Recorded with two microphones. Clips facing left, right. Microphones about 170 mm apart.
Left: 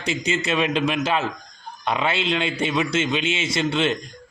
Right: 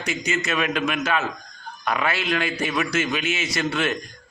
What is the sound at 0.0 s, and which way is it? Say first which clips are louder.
A man's voice: left 2 dB; 30° left (ahead or behind).